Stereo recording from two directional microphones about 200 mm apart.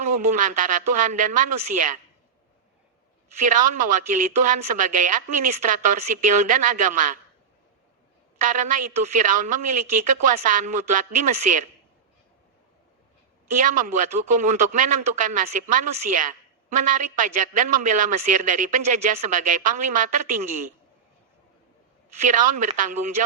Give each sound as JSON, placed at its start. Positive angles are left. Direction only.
{"t": 0.2, "sound": "speech", "side_deg": -40}
{"t": 3.3, "sound": "speech", "side_deg": -40}
{"t": 8.4, "sound": "speech", "side_deg": -40}
{"t": 13.6, "sound": "speech", "side_deg": -40}
{"t": 22.2, "sound": "speech", "side_deg": -40}